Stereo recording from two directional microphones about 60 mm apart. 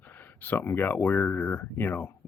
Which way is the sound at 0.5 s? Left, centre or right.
Left.